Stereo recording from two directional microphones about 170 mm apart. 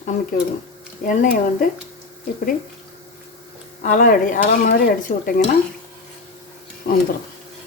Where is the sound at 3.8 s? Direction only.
55° left (ahead or behind).